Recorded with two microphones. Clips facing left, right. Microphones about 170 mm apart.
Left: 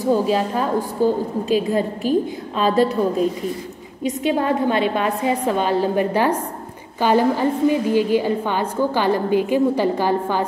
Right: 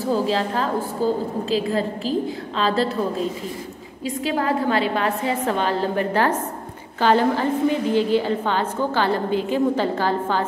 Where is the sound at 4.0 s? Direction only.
20° left (ahead or behind).